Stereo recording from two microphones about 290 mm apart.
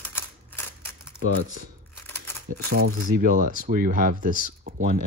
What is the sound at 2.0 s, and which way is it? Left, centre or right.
Crumpling, centre.